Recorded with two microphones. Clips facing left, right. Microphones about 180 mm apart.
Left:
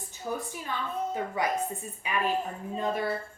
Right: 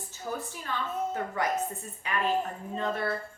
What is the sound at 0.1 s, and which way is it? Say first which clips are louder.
A woman's voice: left 2 dB; 15° left (ahead or behind).